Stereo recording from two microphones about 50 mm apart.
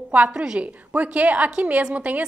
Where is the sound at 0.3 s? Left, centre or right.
Centre.